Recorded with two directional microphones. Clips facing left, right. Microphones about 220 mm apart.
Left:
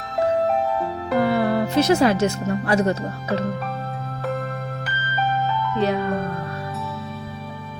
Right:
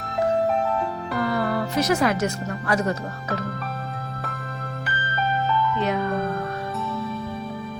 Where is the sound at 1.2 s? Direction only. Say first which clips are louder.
Left 4 dB; 25° left (ahead or behind).